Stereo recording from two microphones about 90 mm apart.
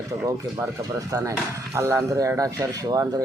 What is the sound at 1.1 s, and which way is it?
Speech, 35° right (ahead or behind).